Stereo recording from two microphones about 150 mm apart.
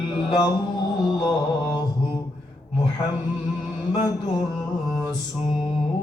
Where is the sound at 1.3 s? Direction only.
25° left (ahead or behind).